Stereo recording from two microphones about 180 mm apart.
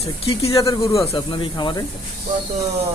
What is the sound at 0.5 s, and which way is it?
Speech, 20° left (ahead or behind).